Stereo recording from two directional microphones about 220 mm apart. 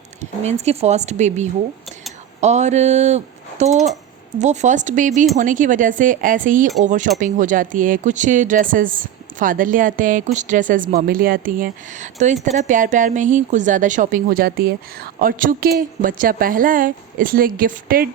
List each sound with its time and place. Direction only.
0.2 s a woman's voice: 30° right (ahead or behind)